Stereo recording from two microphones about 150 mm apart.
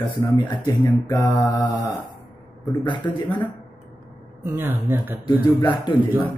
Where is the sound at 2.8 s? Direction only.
30° left (ahead or behind).